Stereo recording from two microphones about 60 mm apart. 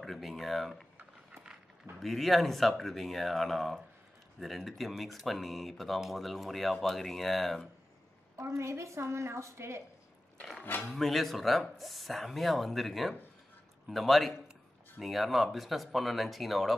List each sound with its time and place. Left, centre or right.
0.0 s speech: centre
2.0 s speech: centre
8.5 s a woman's voice: right
10.6 s speech: left
10.9 s speech: centre